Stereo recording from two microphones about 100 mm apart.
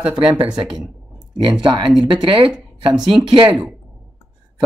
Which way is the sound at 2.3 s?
60° right (ahead or behind).